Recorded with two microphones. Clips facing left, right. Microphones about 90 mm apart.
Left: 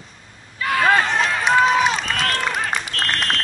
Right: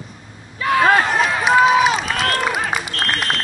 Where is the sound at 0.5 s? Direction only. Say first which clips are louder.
Right 3 dB; 5° right (ahead or behind).